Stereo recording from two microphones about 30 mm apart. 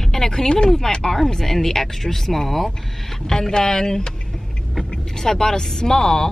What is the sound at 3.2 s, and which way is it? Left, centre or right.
Speech, centre.